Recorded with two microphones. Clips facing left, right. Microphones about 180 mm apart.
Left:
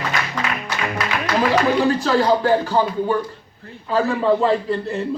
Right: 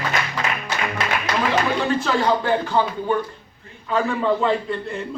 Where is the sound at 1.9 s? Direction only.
35° left (ahead or behind).